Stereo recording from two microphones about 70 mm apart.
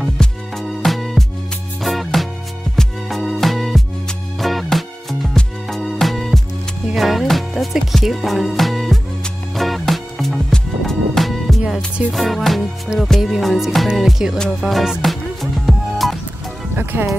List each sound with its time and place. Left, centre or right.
0.2 s music: centre
16.9 s speech: right